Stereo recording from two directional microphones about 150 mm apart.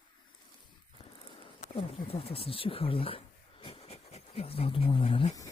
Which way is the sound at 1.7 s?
40° left (ahead or behind).